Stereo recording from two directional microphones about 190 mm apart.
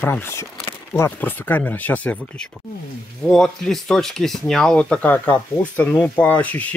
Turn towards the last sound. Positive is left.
turn(degrees=10)  # may be behind; listen again after turning